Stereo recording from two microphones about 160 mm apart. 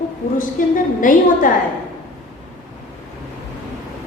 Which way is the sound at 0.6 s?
60° left (ahead or behind).